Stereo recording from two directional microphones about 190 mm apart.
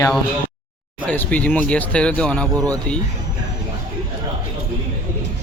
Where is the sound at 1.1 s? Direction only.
10° left (ahead or behind).